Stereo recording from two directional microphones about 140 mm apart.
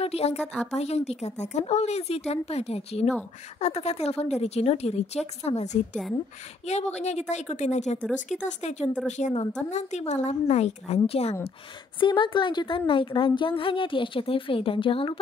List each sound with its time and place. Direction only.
0.0 s a woman's voice: 45° left (ahead or behind)
12.0 s a woman's voice: 35° left (ahead or behind)